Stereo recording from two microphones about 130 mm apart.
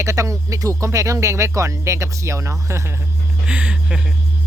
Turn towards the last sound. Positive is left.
turn(degrees=-10)  # may be behind; listen again after turning